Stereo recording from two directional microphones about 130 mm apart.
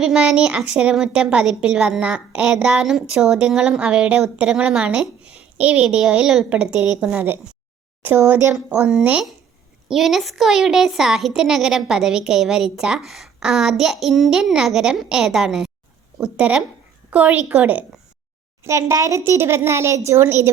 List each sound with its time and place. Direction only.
0.0 s a woman's voice: 5° right (ahead or behind); by 8.5 s 20° right (ahead or behind)
8.9 s a woman's voice: 5° right (ahead or behind)
18.6 s speech: 20° right (ahead or behind)